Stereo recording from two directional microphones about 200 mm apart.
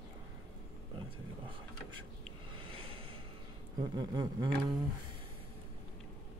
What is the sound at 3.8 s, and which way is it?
Speech, 20° right (ahead or behind).